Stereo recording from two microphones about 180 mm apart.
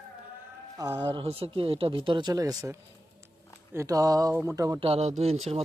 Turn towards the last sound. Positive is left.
turn(degrees=-35)  # may be behind; listen again after turning